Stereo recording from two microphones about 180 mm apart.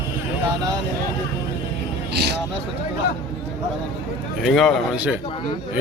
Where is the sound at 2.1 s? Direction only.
65° right (ahead or behind).